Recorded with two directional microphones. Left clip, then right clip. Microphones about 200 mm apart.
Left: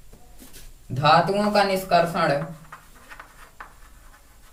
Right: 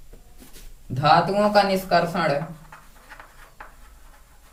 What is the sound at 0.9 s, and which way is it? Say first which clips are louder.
Speech: even; 15° left (ahead or behind).